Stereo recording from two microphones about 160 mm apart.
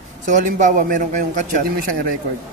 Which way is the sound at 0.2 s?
50° right (ahead or behind).